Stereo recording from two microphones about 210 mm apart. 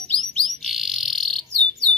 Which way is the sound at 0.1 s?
Centre (ahead or behind).